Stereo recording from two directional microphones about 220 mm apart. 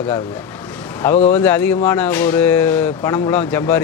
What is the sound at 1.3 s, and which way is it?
Speech, 10° left (ahead or behind).